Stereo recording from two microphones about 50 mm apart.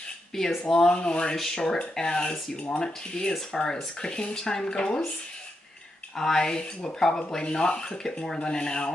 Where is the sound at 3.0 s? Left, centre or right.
Centre.